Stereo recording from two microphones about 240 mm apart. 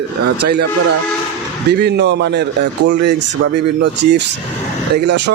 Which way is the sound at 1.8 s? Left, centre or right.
Right.